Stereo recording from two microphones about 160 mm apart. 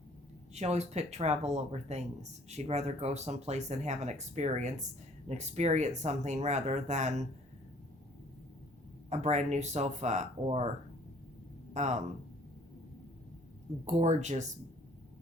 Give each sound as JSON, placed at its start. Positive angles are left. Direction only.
{"t": 0.5, "sound": "speech", "side_deg": -45}
{"t": 9.0, "sound": "speech", "side_deg": -45}
{"t": 11.7, "sound": "speech", "side_deg": -45}
{"t": 13.8, "sound": "speech", "side_deg": -45}